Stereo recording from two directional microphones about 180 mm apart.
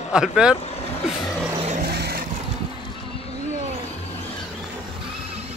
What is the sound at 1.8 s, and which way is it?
Vehicle, 60° right (ahead or behind).